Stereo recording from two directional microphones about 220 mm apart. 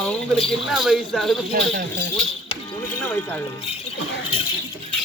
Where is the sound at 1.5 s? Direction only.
45° right (ahead or behind).